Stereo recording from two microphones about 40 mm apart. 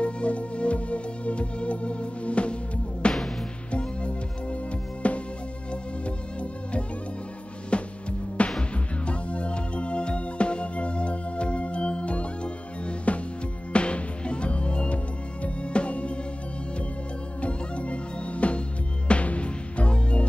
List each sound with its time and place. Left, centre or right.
0.0 s music: left
17.4 s music: left